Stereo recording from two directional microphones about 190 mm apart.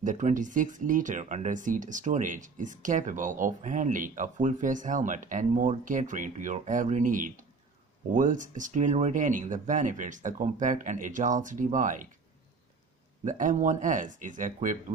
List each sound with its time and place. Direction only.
0.0 s speech: 40° right (ahead or behind)
13.2 s speech: 40° right (ahead or behind)